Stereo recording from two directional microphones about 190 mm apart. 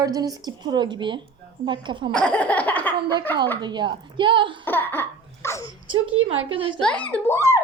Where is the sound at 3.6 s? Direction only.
25° right (ahead or behind).